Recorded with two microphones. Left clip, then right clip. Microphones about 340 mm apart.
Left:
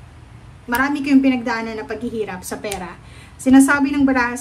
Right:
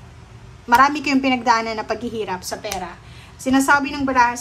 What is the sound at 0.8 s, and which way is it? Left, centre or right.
A woman's voice, centre.